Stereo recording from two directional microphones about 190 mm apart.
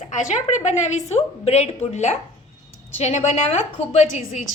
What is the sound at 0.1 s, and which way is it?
A woman's voice, 40° left (ahead or behind).